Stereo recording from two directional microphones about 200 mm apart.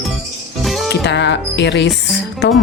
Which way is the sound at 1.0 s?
60° left (ahead or behind).